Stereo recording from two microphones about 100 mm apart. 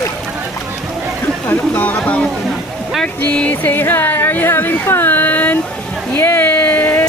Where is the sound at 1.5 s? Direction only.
15° left (ahead or behind).